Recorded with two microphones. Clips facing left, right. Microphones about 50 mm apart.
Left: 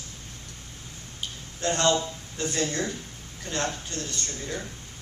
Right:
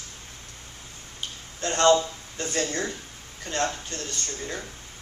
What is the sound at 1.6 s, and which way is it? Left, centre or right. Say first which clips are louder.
Speech: right 4 dB; right.